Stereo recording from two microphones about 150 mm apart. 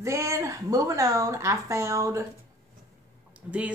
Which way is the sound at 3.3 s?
10° right (ahead or behind).